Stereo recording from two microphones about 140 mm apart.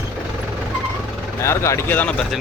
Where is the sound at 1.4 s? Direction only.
20° left (ahead or behind).